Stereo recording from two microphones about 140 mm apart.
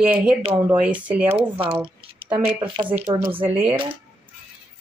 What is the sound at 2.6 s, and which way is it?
Speech, 35° right (ahead or behind).